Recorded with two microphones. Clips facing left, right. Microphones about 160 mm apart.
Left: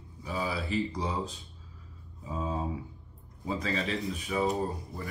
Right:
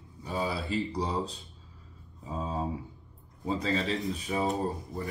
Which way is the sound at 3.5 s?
35° right (ahead or behind).